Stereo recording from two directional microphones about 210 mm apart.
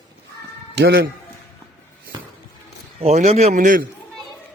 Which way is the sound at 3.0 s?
30° right (ahead or behind).